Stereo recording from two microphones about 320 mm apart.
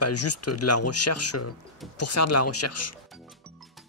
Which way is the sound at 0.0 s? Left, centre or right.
Left.